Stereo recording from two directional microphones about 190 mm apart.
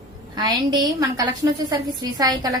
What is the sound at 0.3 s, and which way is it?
A woman's voice, 20° right (ahead or behind).